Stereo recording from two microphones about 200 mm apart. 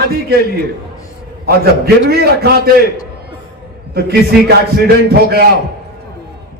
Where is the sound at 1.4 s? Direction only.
50° right (ahead or behind).